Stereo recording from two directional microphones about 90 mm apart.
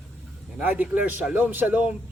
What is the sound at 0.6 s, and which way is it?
A man's voice, 20° right (ahead or behind).